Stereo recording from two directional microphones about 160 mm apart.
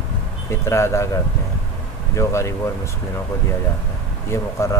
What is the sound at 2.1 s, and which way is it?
Speech, 20° left (ahead or behind).